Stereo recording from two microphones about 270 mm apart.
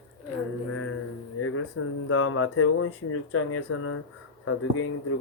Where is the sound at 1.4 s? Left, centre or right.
Left.